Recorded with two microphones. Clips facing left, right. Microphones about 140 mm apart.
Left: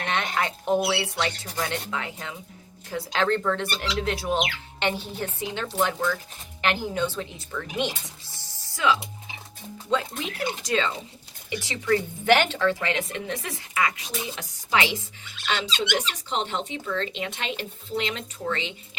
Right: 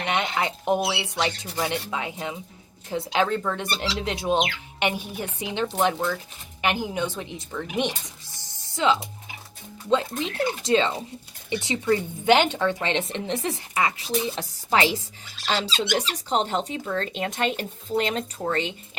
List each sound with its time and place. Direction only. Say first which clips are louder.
0.0 s a sound: right 2 dB; 20° right (ahead or behind)
0.3 s speech: left 3 dB; 20° right (ahead or behind)
3.2 s speech: left 2 dB; 10° right (ahead or behind)
3.7 s a woman's voice: even; 25° right (ahead or behind)